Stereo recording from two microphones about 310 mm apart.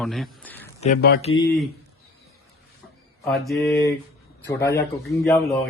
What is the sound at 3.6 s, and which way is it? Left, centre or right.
Mantra, centre.